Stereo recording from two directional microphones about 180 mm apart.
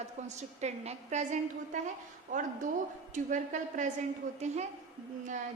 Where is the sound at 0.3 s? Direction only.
40° right (ahead or behind).